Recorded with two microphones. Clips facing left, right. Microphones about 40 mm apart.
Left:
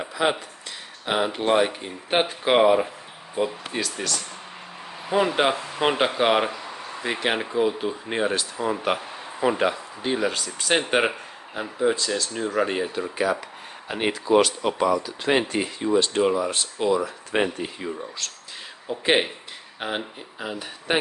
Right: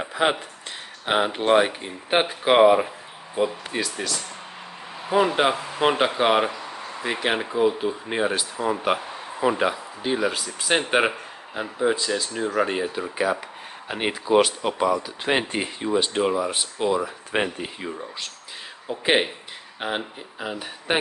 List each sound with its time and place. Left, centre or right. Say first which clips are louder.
0.1 s speech: right 1 dB; right
1.0 s speech: right 2 dB; right
1.7 s speech: right 2 dB; centre
15.0 s speech: left 1 dB; centre
15.4 s speech: left 1 dB; right
15.8 s speech: left 2 dB; centre
18.9 s speech: even; centre